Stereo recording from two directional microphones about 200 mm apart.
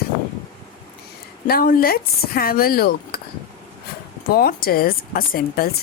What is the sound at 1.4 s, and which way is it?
A woman's voice, 50° left (ahead or behind).